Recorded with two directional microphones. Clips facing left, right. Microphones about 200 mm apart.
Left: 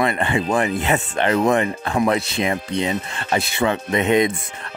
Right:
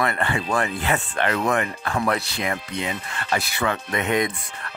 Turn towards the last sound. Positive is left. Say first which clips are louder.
# left 5 dB
turn(degrees=25)  # may be behind; listen again after turning